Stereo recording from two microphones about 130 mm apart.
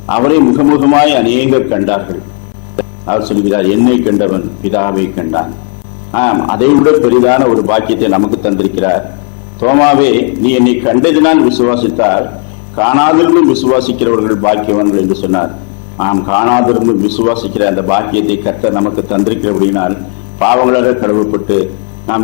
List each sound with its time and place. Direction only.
0.1 s a man's voice: 20° left (ahead or behind)
2.8 s a sound: centre (ahead or behind)
3.2 s a man's voice: 15° left (ahead or behind)